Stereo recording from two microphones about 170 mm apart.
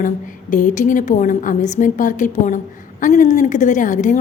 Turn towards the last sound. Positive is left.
turn(degrees=50)  # may be behind; listen again after turning